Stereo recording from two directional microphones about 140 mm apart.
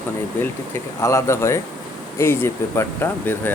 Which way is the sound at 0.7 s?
20° left (ahead or behind).